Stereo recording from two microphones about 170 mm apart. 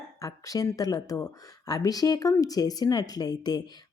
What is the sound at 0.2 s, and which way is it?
Speech, 20° left (ahead or behind).